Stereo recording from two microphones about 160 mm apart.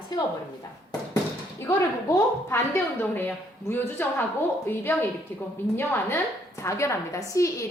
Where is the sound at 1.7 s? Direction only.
20° left (ahead or behind).